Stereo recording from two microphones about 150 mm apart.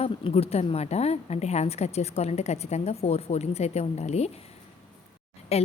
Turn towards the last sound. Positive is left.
turn(degrees=40)  # may be behind; listen again after turning